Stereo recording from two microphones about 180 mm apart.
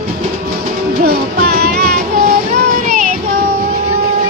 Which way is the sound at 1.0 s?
60° right (ahead or behind).